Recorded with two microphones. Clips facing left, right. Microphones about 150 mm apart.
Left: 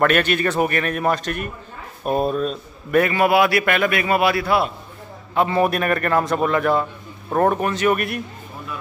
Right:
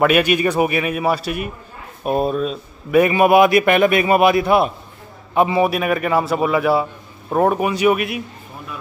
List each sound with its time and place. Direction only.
0.0 s a man's voice: 10° right (ahead or behind)
3.0 s a man's voice: 15° right (ahead or behind)
5.6 s a man's voice: 5° right (ahead or behind)